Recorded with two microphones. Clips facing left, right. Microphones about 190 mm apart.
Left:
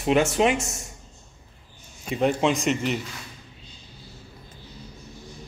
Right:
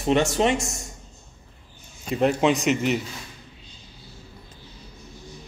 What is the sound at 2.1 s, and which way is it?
Speech, centre (ahead or behind).